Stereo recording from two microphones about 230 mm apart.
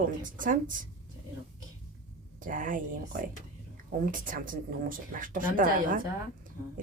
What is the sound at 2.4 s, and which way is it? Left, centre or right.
Speech, right.